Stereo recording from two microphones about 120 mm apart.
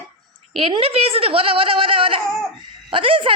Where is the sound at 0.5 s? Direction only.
50° right (ahead or behind).